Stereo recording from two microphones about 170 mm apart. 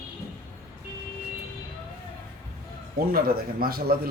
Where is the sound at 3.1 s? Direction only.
60° right (ahead or behind).